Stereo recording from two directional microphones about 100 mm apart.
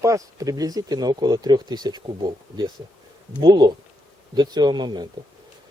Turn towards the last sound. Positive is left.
turn(degrees=-45)  # may be behind; listen again after turning